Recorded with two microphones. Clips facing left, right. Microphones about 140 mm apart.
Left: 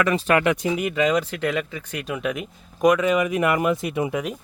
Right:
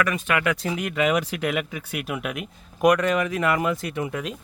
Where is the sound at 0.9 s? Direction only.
10° right (ahead or behind).